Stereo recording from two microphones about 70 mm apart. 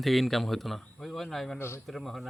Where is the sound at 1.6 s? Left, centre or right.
Left.